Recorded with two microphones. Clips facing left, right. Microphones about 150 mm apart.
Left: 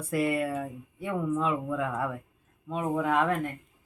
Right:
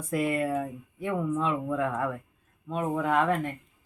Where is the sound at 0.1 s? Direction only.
5° left (ahead or behind).